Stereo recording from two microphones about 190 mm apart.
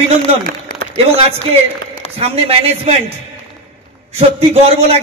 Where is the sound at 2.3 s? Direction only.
30° right (ahead or behind).